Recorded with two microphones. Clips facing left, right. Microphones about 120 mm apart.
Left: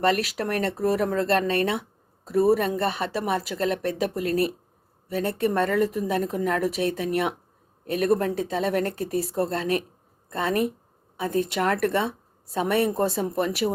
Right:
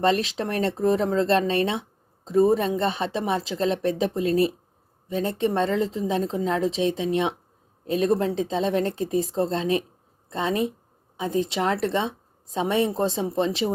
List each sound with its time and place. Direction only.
0.0 s speech: 25° right (ahead or behind)